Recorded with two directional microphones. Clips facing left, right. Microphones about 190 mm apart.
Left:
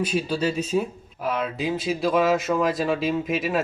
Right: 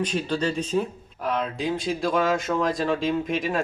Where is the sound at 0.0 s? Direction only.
10° left (ahead or behind).